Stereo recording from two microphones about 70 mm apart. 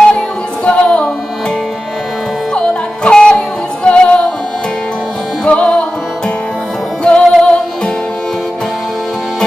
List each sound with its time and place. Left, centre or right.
0.7 s music: centre
2.5 s music: centre
5.4 s music: centre
7.0 s music: centre